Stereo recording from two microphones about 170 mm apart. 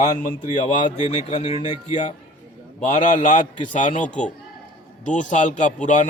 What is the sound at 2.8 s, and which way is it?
A man's voice, 45° left (ahead or behind).